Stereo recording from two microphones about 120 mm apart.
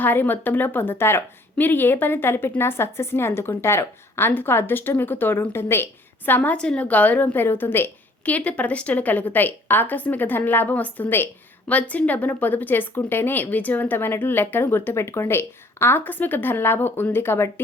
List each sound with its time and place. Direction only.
0.0 s a woman's voice: 15° left (ahead or behind)